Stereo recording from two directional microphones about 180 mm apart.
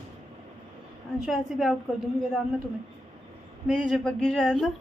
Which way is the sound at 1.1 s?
Centre (ahead or behind).